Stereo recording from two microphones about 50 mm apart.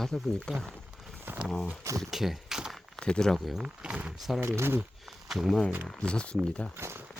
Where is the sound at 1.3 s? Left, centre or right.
Right.